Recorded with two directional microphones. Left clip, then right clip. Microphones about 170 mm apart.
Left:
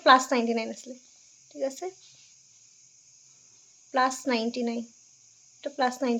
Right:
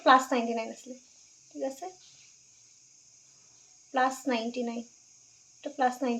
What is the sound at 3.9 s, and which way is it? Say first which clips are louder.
Speech: left 2 dB; 35° left (ahead or behind).